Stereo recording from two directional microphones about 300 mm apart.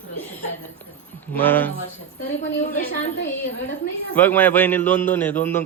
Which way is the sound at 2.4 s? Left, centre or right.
Left.